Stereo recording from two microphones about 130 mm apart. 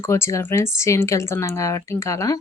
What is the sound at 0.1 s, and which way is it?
A woman's voice, 20° left (ahead or behind).